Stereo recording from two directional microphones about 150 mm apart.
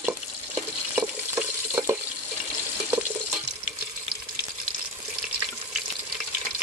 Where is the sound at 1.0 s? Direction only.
15° right (ahead or behind).